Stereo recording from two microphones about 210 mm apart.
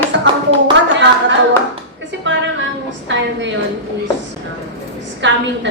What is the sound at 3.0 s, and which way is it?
Speech, 60° right (ahead or behind).